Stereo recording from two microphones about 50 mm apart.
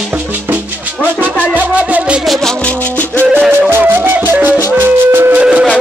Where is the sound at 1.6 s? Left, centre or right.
Right.